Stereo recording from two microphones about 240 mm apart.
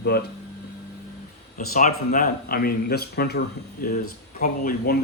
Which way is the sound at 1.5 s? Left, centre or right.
Left.